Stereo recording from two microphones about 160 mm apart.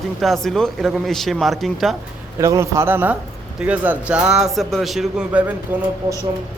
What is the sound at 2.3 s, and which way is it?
A man's voice, 20° right (ahead or behind).